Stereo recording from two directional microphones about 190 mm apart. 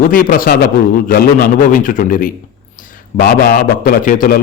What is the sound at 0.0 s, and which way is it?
A man's voice, 45° left (ahead or behind).